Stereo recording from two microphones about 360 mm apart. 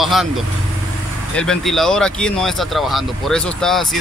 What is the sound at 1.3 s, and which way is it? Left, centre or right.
Speech, centre.